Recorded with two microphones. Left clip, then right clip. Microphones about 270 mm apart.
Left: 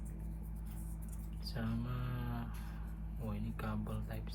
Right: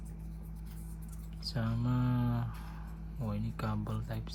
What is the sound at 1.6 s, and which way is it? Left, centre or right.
Music, right.